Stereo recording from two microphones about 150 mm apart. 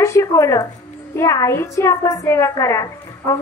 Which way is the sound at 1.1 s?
20° left (ahead or behind).